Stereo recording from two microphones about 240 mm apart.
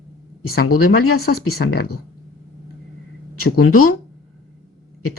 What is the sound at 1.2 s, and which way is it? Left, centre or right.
Speech, left.